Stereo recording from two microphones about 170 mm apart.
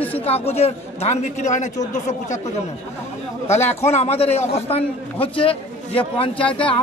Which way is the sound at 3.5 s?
40° left (ahead or behind).